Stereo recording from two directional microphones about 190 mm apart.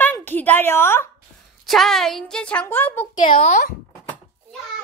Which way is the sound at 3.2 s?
30° left (ahead or behind).